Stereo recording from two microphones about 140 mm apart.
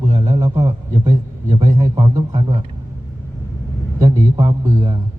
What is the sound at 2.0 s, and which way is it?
Speech, 30° right (ahead or behind).